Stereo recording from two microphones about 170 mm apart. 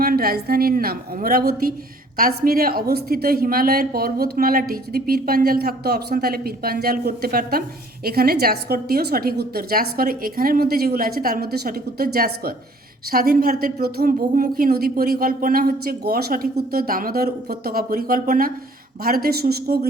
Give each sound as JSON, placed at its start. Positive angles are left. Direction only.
{"t": 0.0, "sound": "a woman's voice", "side_deg": -60}